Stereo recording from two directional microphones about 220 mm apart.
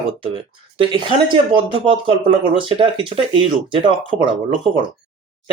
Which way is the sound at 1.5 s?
25° right (ahead or behind).